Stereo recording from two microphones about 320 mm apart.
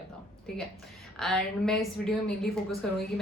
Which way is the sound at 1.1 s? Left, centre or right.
Centre.